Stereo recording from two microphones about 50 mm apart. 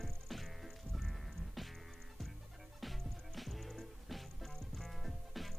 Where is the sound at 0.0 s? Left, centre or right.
Centre.